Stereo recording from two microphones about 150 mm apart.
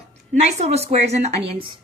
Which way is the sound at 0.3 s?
45° right (ahead or behind).